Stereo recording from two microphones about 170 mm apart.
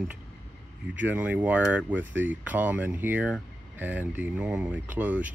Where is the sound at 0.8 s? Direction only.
10° right (ahead or behind).